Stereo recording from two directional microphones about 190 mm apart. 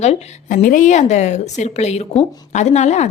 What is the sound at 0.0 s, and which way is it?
A woman's voice, 35° left (ahead or behind).